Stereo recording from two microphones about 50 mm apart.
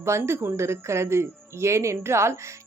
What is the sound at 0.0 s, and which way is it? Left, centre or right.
Speech, right.